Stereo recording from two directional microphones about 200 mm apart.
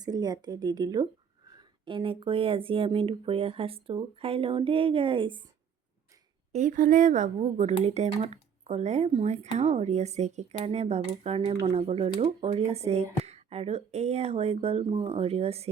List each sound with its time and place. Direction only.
0.0 s speech: 20° right (ahead or behind)
6.5 s speech: 40° right (ahead or behind)